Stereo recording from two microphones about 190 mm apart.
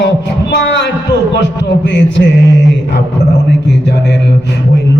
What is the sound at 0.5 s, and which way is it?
Heart sounds, 70° left (ahead or behind).